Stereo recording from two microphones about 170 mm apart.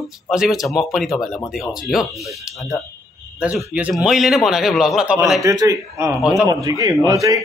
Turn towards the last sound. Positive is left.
turn(degrees=-20)  # may be behind; listen again after turning